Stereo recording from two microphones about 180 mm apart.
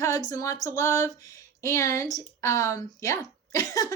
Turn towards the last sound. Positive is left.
turn(degrees=20)  # may be behind; listen again after turning